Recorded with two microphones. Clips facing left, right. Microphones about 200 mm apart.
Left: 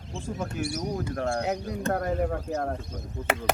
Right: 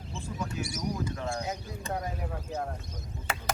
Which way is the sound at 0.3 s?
50° left (ahead or behind).